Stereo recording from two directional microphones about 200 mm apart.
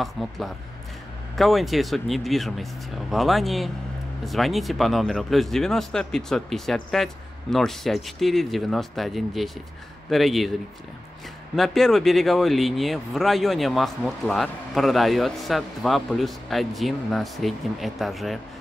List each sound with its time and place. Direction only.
0.0 s speech: centre (ahead or behind)
11.5 s speech: centre (ahead or behind)